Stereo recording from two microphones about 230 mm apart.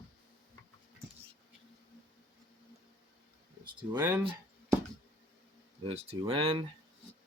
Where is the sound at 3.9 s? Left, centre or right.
Centre.